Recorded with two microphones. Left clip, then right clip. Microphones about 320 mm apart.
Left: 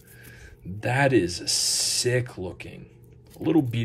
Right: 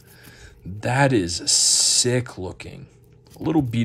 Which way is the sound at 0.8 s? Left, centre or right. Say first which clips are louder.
Right 2 dB; centre.